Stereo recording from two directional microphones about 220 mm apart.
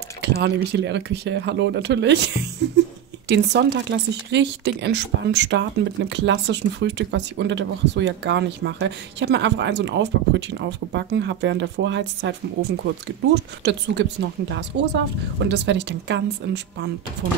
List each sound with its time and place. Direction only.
0.2 s speech: 50° right (ahead or behind)